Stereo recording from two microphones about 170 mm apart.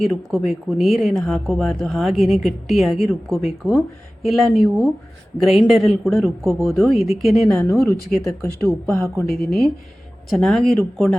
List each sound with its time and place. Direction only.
0.0 s speech: centre (ahead or behind)
7.6 s speech: 10° left (ahead or behind)
9.2 s speech: centre (ahead or behind)